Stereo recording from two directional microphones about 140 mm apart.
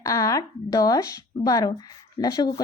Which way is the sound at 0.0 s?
25° left (ahead or behind).